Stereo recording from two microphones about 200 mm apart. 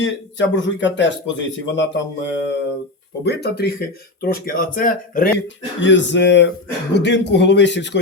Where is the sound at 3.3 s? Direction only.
55° left (ahead or behind).